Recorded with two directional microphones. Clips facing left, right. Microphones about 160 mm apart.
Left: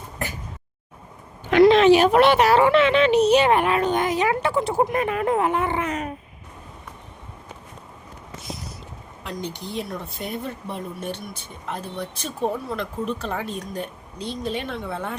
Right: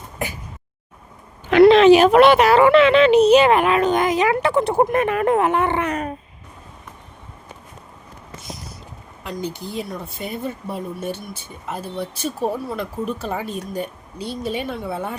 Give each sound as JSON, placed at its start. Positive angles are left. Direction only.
{"t": 1.5, "sound": "speech", "side_deg": -80}
{"t": 9.2, "sound": "speech", "side_deg": -5}